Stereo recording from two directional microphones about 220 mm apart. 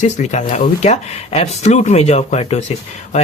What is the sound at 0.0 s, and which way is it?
Speech, 30° left (ahead or behind).